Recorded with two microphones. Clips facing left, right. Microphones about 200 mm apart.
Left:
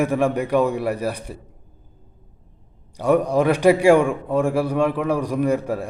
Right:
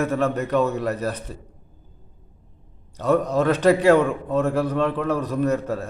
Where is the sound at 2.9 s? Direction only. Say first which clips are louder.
Left 2 dB; 10° left (ahead or behind).